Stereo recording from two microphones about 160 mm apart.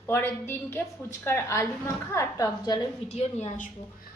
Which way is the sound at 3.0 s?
45° left (ahead or behind).